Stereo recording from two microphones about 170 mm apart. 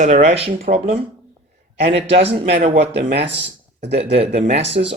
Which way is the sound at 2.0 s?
35° right (ahead or behind).